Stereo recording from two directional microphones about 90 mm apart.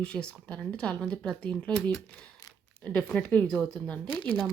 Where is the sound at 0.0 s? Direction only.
10° left (ahead or behind).